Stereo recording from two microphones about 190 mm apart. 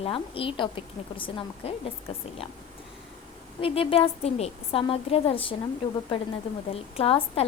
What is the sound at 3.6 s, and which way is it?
A woman's voice, 30° left (ahead or behind).